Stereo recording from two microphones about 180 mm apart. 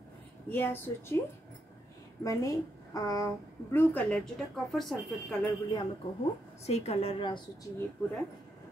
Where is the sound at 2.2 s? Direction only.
20° left (ahead or behind); by 4.9 s centre (ahead or behind).